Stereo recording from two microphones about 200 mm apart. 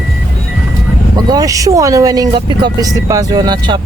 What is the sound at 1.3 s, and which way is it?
Speech, 15° right (ahead or behind).